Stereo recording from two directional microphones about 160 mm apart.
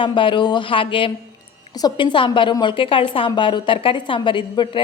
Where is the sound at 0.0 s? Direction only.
30° left (ahead or behind).